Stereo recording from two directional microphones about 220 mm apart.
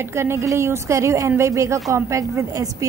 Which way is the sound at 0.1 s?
10° right (ahead or behind).